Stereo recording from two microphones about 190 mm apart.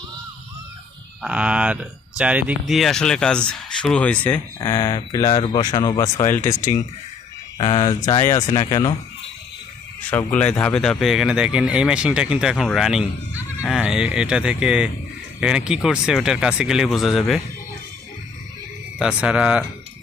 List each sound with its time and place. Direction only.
1.2 s speech: 5° right (ahead or behind)
4.6 s speech: 20° left (ahead or behind)
7.6 s speech: 25° left (ahead or behind)
8.2 s speech: 40° left (ahead or behind)
8.7 s speech: 20° left (ahead or behind)
10.1 s speech: 10° left (ahead or behind)
18.9 s speech: 5° right (ahead or behind)